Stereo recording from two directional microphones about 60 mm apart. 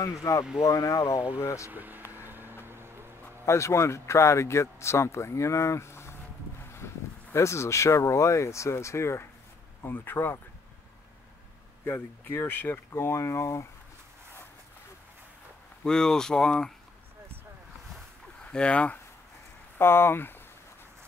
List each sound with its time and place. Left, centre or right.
0.2 s speech: left
1.7 s speech: right
2.1 s vehicle: right
2.6 s music: right
3.4 s speech: left
7.3 s speech: left
9.8 s speech: left
11.8 s speech: left
15.8 s speech: centre
18.4 s speech: centre
19.8 s speech: left